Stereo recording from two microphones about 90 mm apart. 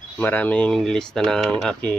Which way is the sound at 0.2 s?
15° left (ahead or behind).